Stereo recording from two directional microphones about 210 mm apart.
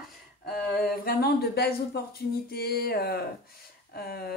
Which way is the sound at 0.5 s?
45° left (ahead or behind).